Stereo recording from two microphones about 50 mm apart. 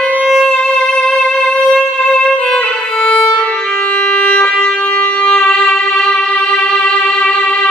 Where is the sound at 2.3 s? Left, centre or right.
Centre.